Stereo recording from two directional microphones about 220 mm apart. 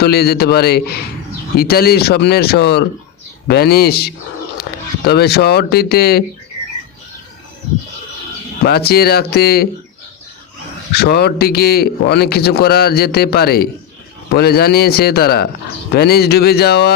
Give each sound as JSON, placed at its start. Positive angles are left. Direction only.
{"t": 0.0, "sound": "a man's voice", "side_deg": 45}
{"t": 4.7, "sound": "a sound", "side_deg": 45}
{"t": 5.0, "sound": "a man's voice", "side_deg": 45}
{"t": 8.6, "sound": "a man's voice", "side_deg": 45}
{"t": 10.9, "sound": "a man's voice", "side_deg": 45}